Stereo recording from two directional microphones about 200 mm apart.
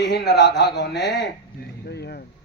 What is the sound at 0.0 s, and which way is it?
A man's voice, 55° left (ahead or behind).